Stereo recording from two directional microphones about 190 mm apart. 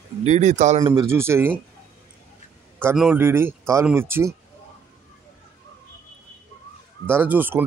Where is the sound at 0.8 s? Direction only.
20° right (ahead or behind).